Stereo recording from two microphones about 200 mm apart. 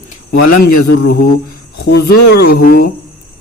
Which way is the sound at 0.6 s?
50° left (ahead or behind).